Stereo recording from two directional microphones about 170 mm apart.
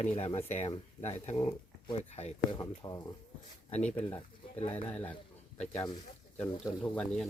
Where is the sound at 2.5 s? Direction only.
25° left (ahead or behind).